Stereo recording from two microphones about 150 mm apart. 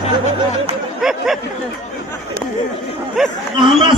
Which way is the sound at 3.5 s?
30° right (ahead or behind).